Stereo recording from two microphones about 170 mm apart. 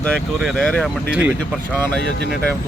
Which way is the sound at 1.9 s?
80° right.